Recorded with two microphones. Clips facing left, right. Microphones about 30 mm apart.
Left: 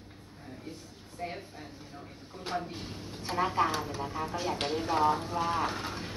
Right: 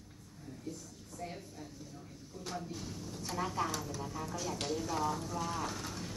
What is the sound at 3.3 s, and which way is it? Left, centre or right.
Speech, left.